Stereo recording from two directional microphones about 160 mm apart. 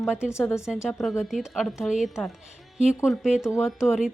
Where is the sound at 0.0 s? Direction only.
5° right (ahead or behind).